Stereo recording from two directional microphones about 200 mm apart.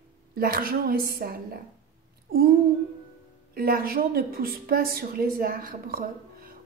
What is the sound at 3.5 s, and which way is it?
A woman's voice, 50° right (ahead or behind).